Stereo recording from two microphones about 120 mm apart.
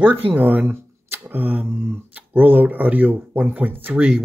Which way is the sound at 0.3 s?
15° right (ahead or behind).